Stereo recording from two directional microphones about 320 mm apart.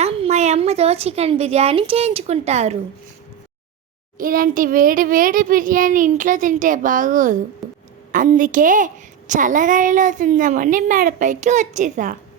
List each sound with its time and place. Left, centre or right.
0.0 s a woman's voice: centre
4.2 s a woman's voice: right
7.6 s a sound: centre
8.1 s a woman's voice: right